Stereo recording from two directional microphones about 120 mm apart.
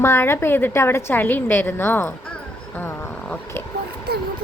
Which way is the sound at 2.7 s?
20° left (ahead or behind).